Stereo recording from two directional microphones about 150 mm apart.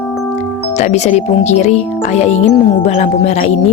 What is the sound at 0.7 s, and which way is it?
Speech, 50° left (ahead or behind).